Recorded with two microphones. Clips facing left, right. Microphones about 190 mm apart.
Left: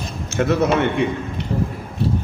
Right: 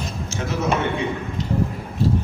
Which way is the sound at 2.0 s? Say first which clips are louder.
Right 1 dB; 60° left (ahead or behind).